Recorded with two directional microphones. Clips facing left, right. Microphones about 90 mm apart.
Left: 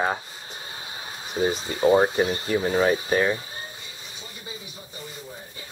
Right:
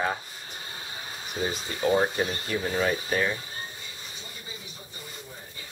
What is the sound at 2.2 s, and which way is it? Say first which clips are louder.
Speech: left 5 dB; 20° left (ahead or behind).